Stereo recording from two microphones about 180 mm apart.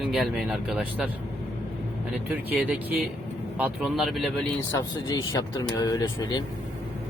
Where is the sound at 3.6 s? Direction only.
5° right (ahead or behind).